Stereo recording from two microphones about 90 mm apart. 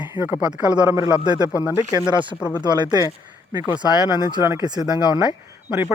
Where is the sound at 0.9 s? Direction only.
35° right (ahead or behind).